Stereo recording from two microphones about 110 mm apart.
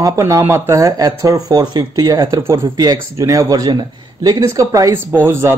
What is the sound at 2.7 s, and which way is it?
Speech, 35° right (ahead or behind).